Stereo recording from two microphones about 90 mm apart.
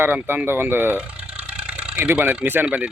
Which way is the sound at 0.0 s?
20° right (ahead or behind).